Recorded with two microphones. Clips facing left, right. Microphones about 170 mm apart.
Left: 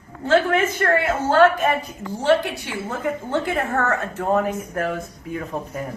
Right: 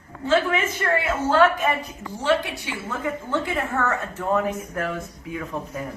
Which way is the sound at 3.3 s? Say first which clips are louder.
Left 2 dB; 45° left (ahead or behind).